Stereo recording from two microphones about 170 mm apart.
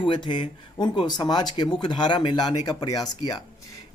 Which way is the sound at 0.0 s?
30° left (ahead or behind).